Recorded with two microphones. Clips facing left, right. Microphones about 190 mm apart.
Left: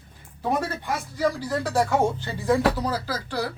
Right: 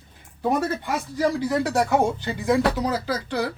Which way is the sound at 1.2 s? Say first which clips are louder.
Right 3 dB; 20° right (ahead or behind).